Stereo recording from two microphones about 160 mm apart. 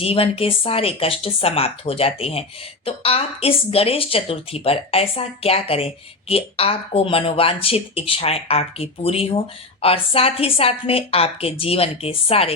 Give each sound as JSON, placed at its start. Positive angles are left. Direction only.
{"t": 0.0, "sound": "speech", "side_deg": 35}